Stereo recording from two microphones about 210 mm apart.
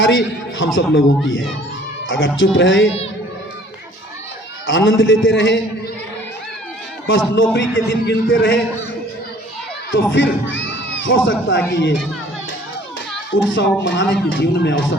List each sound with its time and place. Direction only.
0.0 s a man's voice: 60° left (ahead or behind)
2.0 s speech: 65° left (ahead or behind)
4.6 s speech: 65° left (ahead or behind)
7.1 s speech: 60° left (ahead or behind)
9.9 s speech: 60° left (ahead or behind)
13.3 s speech: 60° left (ahead or behind)